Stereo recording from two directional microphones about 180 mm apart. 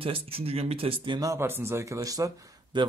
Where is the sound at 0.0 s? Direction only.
30° right (ahead or behind).